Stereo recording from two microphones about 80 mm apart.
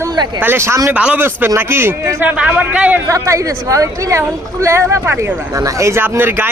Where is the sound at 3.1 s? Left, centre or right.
Right.